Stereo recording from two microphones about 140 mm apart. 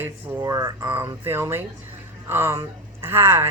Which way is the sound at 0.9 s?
15° right (ahead or behind).